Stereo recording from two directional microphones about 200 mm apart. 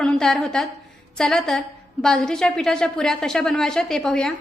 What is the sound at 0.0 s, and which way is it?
A woman's voice, 5° left (ahead or behind).